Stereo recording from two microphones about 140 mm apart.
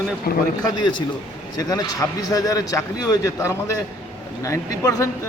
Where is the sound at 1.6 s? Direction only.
25° left (ahead or behind).